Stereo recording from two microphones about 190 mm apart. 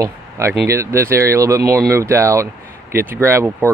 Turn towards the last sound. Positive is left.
turn(degrees=-10)  # may be behind; listen again after turning